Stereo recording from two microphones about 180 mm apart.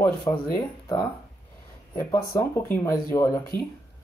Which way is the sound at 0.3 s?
20° left (ahead or behind).